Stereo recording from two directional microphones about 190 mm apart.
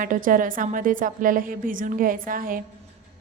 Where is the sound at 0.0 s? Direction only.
45° right (ahead or behind).